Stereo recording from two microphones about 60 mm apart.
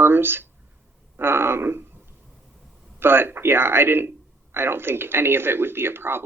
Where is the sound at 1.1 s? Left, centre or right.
Right.